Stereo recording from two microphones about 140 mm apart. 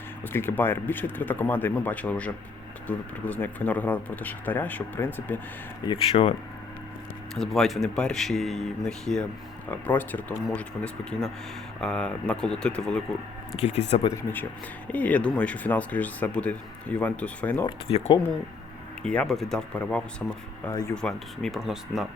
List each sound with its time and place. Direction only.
0.2 s speech: 15° left (ahead or behind)
5.8 s speech: 35° left (ahead or behind)
7.3 s speech: 5° left (ahead or behind)
13.6 s speech: 50° left (ahead or behind)
14.1 s speech: 15° left (ahead or behind)
17.7 s speech: 45° left (ahead or behind)
19.0 s speech: 5° left (ahead or behind)
20.7 s speech: 20° left (ahead or behind)
20.9 s speech: 5° left (ahead or behind)